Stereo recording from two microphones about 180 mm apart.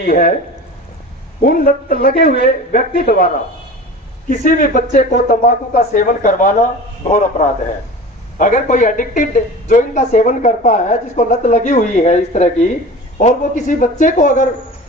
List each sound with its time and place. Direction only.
0.0 s speech: 55° left (ahead or behind)
1.4 s a man's voice: 55° left (ahead or behind)
4.3 s speech: 50° left (ahead or behind)